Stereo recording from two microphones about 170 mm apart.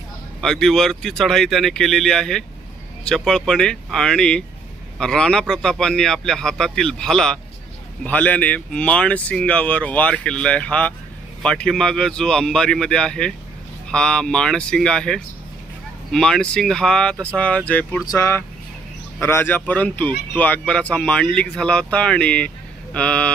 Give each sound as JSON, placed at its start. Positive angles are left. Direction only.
{"t": 0.4, "sound": "a man's voice", "side_deg": 5}